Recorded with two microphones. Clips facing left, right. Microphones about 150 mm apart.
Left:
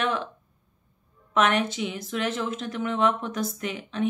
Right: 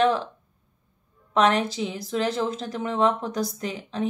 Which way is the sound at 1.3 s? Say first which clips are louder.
Right 2 dB; 35° right (ahead or behind).